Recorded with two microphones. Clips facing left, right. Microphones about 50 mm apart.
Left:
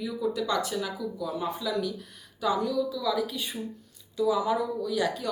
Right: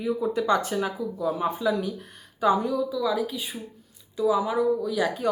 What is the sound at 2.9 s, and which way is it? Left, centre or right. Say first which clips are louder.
A woman's voice: right 3 dB; centre.